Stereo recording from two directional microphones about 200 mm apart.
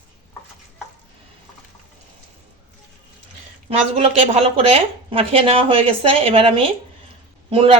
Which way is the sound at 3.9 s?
30° right (ahead or behind).